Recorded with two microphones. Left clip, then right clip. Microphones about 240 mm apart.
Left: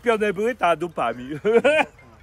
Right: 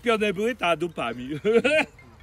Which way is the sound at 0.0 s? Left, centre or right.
Centre.